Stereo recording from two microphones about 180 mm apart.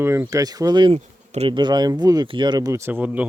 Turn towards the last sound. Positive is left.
turn(degrees=-10)  # may be behind; listen again after turning